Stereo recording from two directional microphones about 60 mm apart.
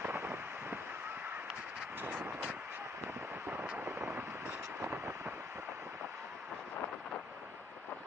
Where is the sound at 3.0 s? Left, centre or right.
Right.